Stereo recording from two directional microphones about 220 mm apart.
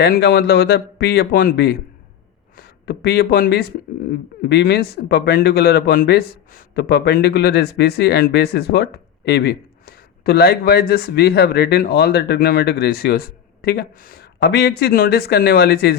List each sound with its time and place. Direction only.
0.0 s speech: 45° left (ahead or behind)